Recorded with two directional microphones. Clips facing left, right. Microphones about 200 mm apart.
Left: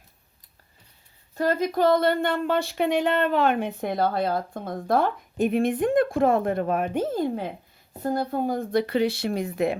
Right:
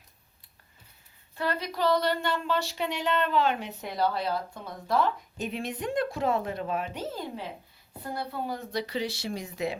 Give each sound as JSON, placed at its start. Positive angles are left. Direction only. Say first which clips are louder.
{"t": 1.4, "sound": "speech", "louder": "left 7 dB", "side_deg": 45}